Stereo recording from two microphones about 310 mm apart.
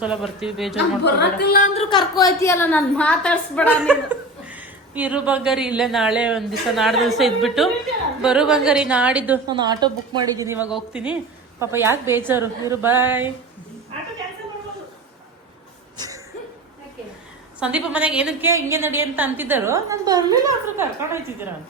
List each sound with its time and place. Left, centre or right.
0.0 s speech: centre
0.8 s a woman's voice: left; by 13.2 s centre
16.0 s a sound: centre
17.6 s a woman's voice: centre